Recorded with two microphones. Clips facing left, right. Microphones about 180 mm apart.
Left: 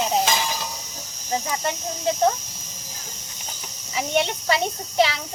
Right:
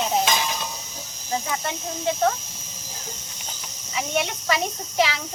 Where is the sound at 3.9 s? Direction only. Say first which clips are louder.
Left 3 dB; 30° left (ahead or behind).